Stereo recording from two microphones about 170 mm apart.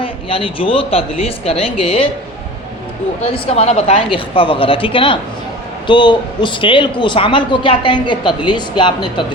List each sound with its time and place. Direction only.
0.0 s speech: 30° left (ahead or behind)
3.3 s a woman's voice: 35° left (ahead or behind)